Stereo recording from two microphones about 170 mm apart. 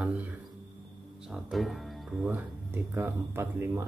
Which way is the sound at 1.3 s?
Centre (ahead or behind).